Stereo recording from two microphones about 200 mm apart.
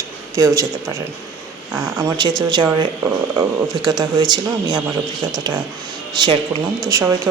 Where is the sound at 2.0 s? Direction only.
20° right (ahead or behind).